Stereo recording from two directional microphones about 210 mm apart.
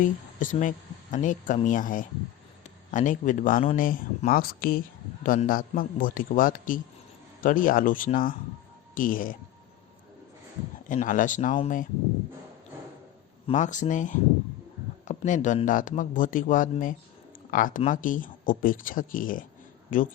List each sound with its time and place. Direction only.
0.0 s speech: 40° left (ahead or behind)
10.8 s speech: 40° left (ahead or behind)
13.5 s speech: 35° left (ahead or behind)